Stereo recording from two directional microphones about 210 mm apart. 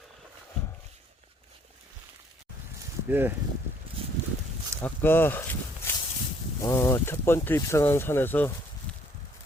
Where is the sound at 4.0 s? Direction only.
25° right (ahead or behind).